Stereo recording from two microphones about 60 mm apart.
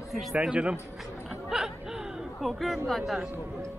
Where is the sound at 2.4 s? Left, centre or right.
Centre.